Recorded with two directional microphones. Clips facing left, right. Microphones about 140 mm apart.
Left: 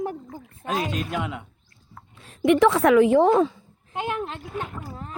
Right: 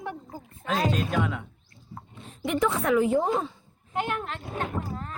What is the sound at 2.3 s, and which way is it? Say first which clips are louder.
A woman's voice: left 8 dB; 80° left.